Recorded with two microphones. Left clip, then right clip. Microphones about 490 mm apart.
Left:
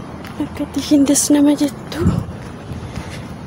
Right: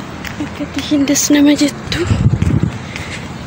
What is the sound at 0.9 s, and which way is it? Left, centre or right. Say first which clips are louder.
Speech: right 1 dB; left.